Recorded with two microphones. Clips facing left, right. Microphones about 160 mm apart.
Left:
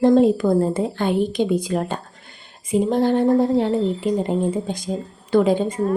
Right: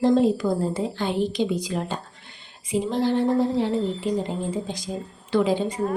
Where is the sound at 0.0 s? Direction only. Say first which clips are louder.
Left 4 dB; 55° left (ahead or behind).